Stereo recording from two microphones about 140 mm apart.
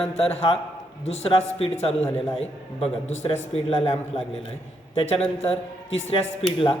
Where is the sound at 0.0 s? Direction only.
45° left (ahead or behind).